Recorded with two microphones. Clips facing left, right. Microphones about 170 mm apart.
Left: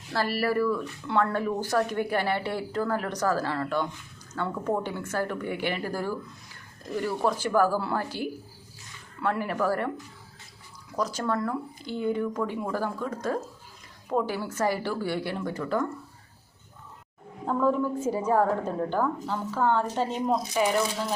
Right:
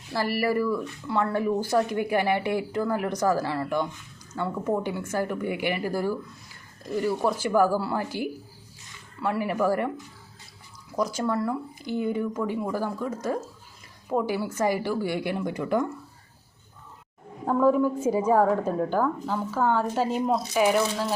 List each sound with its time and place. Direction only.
0.1 s a woman's voice: 15° right (ahead or behind)
10.9 s a woman's voice: 10° right (ahead or behind)
17.4 s a woman's voice: 10° right (ahead or behind)